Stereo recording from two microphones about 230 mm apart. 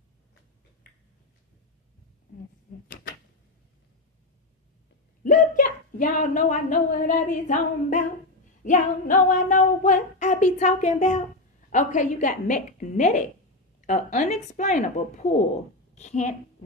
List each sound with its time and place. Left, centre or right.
5.2 s a woman's voice: left
8.6 s child singing: left
15.9 s a woman's voice: left